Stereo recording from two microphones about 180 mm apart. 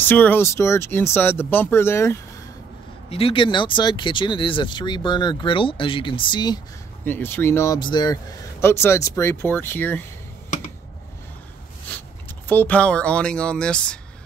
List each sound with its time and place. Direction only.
0.0 s speech: 10° left (ahead or behind)
3.1 s speech: 30° left (ahead or behind)
7.1 s speech: 10° left (ahead or behind)
11.9 s speech: 10° left (ahead or behind)